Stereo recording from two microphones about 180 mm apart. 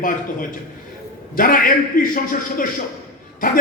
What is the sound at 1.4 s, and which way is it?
Speech, 50° left (ahead or behind).